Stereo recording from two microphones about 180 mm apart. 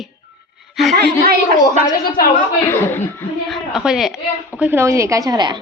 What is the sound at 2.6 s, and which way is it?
Speech, 15° left (ahead or behind).